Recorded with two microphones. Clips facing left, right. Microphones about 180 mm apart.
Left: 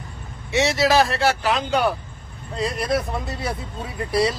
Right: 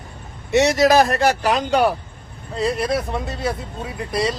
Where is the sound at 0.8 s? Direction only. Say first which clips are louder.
Right 1 dB; 15° right (ahead or behind).